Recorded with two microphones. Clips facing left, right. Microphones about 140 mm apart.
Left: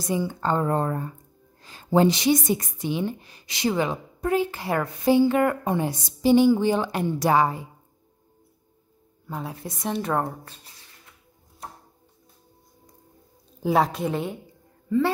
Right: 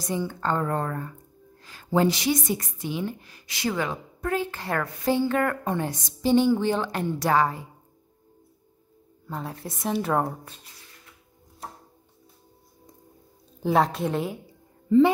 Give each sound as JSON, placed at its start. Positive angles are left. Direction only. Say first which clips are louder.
{"t": 0.1, "sound": "speech", "louder": "left 2 dB", "side_deg": 15}
{"t": 9.3, "sound": "speech", "louder": "left 1 dB", "side_deg": 0}
{"t": 13.6, "sound": "speech", "louder": "even", "side_deg": 0}